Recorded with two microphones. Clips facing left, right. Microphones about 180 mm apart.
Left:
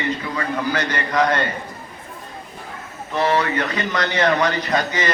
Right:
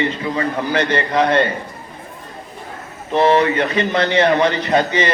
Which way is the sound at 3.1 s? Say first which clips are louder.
Right 6 dB; 25° right (ahead or behind).